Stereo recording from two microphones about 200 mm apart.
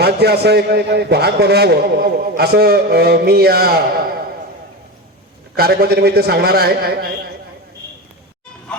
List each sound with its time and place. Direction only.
0.0 s a man's voice: 55° right (ahead or behind)
5.5 s a man's voice: 50° right (ahead or behind)